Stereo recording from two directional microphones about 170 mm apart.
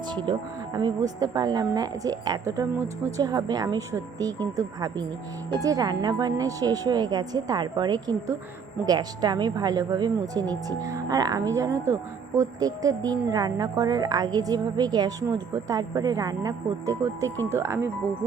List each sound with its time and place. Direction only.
0.1 s speech: 25° right (ahead or behind)